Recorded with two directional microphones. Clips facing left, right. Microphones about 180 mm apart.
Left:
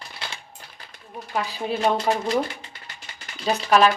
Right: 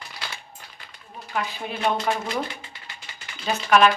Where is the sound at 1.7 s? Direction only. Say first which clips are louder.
Left 4 dB; 35° left (ahead or behind).